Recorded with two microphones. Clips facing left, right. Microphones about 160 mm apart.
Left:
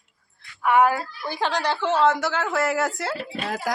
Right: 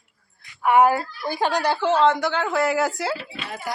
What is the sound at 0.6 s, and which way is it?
A woman's voice, 10° right (ahead or behind).